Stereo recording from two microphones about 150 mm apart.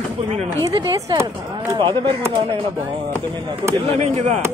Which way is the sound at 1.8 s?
35° right (ahead or behind).